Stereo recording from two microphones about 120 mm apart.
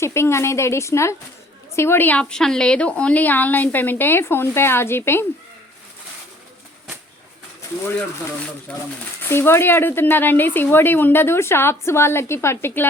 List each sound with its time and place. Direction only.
0.0 s speech: 20° left (ahead or behind)
8.7 s speech: 10° left (ahead or behind)